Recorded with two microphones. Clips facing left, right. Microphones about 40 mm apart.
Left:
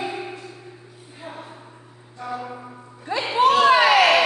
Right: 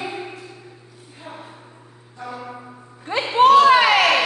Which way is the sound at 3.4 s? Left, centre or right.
Right.